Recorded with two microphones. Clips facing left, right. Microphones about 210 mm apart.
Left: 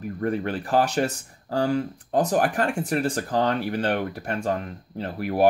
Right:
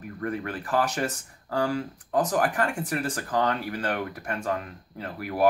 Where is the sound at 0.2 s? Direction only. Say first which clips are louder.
Left 5 dB; 30° left (ahead or behind).